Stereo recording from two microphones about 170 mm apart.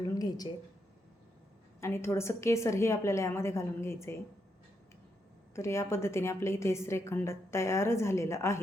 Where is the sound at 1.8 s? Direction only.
15° left (ahead or behind).